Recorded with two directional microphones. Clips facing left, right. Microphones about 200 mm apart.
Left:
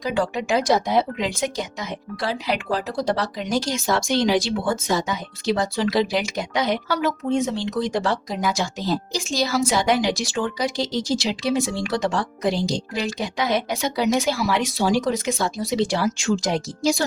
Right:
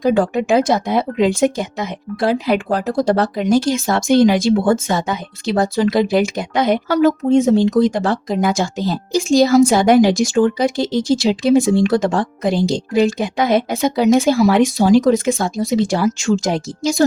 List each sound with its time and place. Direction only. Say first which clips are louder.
0.0 s speech: right 8 dB; 50° right (ahead or behind)